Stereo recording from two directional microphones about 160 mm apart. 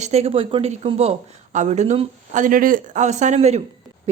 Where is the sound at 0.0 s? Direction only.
40° right (ahead or behind).